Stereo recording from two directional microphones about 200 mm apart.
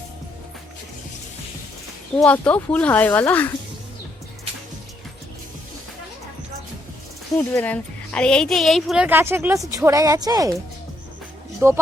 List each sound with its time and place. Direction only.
2.1 s speech: 5° left (ahead or behind)
7.3 s a woman's voice: 10° left (ahead or behind); by 10.5 s 20° right (ahead or behind)
11.6 s speech: 10° right (ahead or behind)